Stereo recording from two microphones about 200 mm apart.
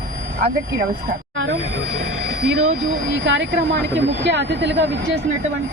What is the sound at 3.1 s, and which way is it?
Speech, 65° right (ahead or behind).